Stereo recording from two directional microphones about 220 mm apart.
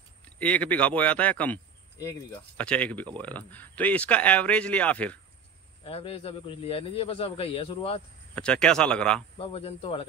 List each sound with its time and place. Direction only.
0.4 s speech: 5° left (ahead or behind)
5.9 s a man's voice: 25° left (ahead or behind)
8.4 s speech: 5° left (ahead or behind)
9.4 s a man's voice: 25° left (ahead or behind)